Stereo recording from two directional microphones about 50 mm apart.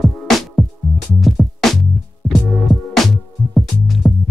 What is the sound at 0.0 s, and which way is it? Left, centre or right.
Music, centre.